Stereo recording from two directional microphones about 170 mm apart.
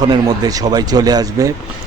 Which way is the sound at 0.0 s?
25° right (ahead or behind).